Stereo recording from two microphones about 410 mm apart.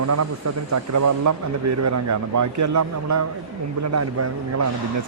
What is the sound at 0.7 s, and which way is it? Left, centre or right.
Speech, right.